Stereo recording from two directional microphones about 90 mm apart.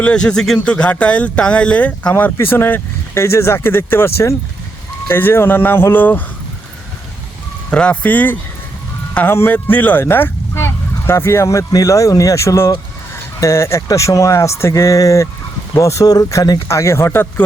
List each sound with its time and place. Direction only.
0.0 s speech: 10° left (ahead or behind)
7.7 s speech: 15° left (ahead or behind)